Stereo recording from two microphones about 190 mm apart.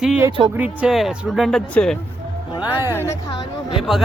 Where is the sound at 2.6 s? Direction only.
10° right (ahead or behind).